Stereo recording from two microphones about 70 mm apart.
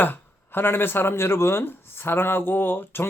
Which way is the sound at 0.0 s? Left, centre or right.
Left.